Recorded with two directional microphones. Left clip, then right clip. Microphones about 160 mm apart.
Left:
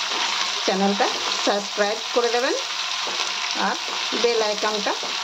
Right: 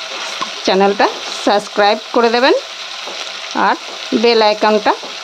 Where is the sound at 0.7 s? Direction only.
90° right.